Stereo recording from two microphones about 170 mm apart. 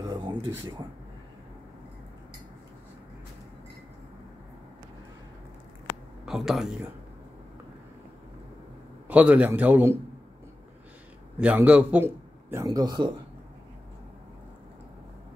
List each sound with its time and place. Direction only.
0.1 s a sound: 25° right (ahead or behind)
6.2 s a man's voice: centre (ahead or behind)
9.0 s a man's voice: 10° right (ahead or behind)
11.3 s a man's voice: 10° right (ahead or behind); by 13.1 s 25° right (ahead or behind)